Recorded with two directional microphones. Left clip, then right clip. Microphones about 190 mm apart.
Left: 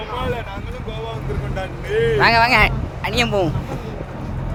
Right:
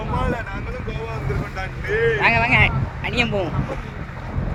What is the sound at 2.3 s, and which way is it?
Speech, 30° left (ahead or behind).